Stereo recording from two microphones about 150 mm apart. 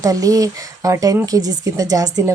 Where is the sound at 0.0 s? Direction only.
25° right (ahead or behind).